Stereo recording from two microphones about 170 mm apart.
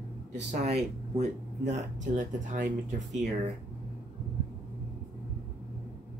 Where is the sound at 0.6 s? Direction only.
40° right (ahead or behind).